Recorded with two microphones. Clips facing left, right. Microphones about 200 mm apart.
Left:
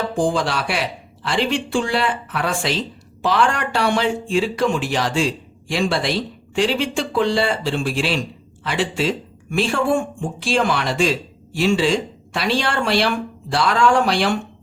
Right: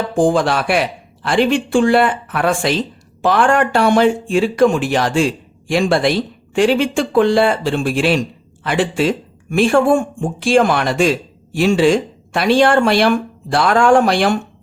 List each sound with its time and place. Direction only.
0.2 s speech: 50° right (ahead or behind)